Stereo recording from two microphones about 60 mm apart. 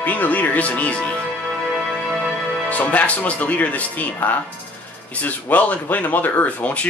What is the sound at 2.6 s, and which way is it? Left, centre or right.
Speech, left.